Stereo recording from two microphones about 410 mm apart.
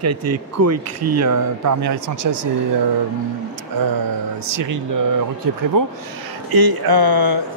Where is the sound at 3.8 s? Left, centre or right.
Right.